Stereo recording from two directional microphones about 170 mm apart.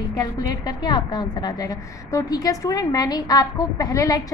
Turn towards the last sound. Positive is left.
turn(degrees=20)  # may be behind; listen again after turning